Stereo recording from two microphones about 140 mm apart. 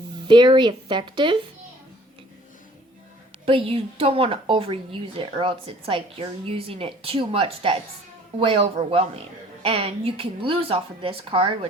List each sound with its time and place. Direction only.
0.3 s a woman's voice: 35° right (ahead or behind)
3.4 s a woman's voice: 40° right (ahead or behind)